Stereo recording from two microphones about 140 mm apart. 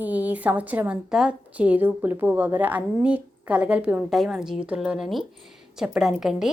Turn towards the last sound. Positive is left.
turn(degrees=-5)  # may be behind; listen again after turning